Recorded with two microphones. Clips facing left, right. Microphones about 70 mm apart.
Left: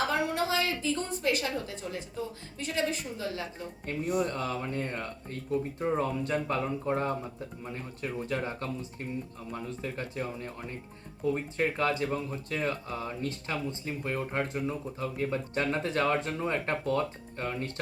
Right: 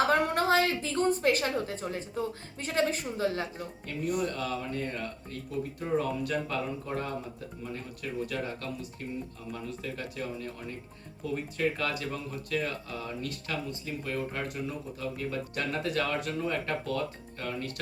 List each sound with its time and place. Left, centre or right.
0.1 s a woman's voice: right
3.9 s speech: left